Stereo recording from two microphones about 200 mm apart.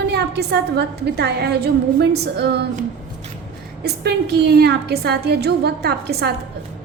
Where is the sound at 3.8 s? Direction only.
55° right (ahead or behind).